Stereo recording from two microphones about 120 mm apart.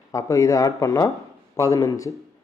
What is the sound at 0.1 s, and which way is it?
Speech, 30° left (ahead or behind).